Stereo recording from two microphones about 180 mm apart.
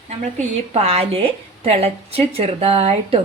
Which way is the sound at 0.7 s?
35° right (ahead or behind).